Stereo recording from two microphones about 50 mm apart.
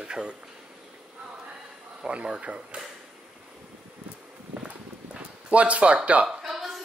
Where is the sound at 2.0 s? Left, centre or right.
Centre.